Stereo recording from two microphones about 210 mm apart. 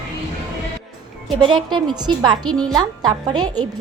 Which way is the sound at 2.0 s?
20° right (ahead or behind).